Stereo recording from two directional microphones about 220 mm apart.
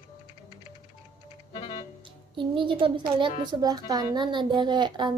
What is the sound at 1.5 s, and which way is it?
Music, 25° left (ahead or behind).